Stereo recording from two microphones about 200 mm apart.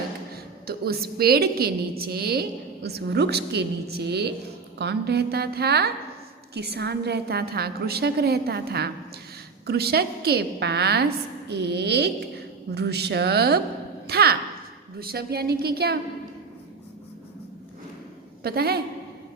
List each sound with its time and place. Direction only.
0.7 s a woman's voice: 50° right (ahead or behind)
18.4 s a woman's voice: 50° right (ahead or behind)